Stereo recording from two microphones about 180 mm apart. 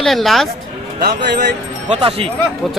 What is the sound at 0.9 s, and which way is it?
Speech, 60° right (ahead or behind).